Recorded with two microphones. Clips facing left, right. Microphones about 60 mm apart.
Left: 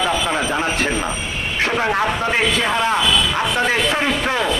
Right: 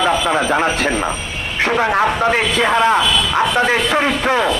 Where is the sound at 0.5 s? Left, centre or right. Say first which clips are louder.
Right 4 dB; right.